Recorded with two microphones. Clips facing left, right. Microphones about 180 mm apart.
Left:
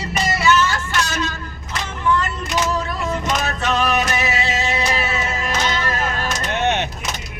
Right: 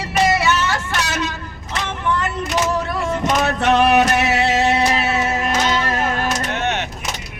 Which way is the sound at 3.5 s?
65° right (ahead or behind).